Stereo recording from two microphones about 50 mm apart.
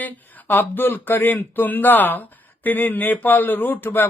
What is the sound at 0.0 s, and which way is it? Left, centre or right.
Speech, left.